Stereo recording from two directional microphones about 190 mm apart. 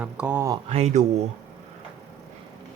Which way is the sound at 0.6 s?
35° right (ahead or behind).